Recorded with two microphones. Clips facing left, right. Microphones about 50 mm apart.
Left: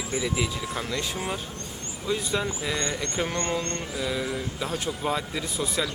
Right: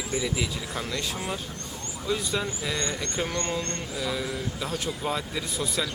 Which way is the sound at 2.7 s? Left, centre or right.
Centre.